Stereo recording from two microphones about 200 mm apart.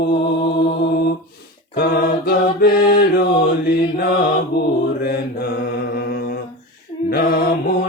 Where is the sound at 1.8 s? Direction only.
50° left (ahead or behind).